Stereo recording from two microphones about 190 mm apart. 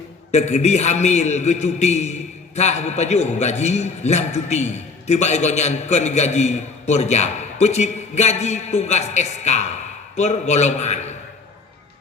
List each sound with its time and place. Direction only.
0.3 s a man's voice: 35° left (ahead or behind)